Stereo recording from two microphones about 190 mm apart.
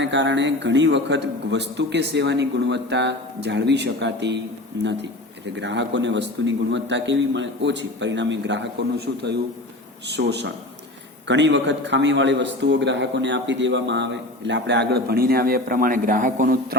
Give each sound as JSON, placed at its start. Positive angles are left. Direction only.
{"t": 0.0, "sound": "a man's voice", "side_deg": -70}